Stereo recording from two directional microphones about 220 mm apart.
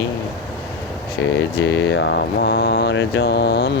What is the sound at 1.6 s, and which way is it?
Speech, 60° left (ahead or behind).